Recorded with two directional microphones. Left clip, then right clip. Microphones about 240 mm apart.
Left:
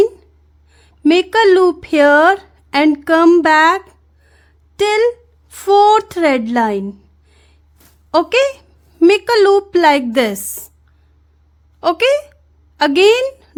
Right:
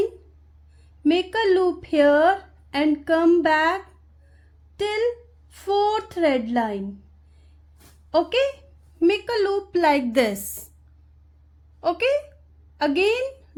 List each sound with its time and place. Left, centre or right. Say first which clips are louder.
0.7 s speech: left 8 dB; left
7.3 s a sound: left 12 dB; left
8.1 s a woman's voice: left 8 dB; left
11.8 s a woman's voice: left 8 dB; left